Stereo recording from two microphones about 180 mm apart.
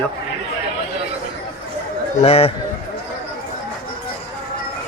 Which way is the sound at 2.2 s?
35° left (ahead or behind).